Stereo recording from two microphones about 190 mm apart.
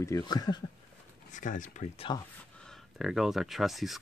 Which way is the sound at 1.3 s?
40° left (ahead or behind).